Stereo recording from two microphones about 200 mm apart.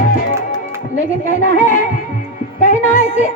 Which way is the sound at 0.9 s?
40° left (ahead or behind).